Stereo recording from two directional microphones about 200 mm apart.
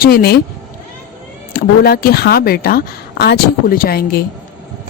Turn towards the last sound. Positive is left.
turn(degrees=50)  # may be behind; listen again after turning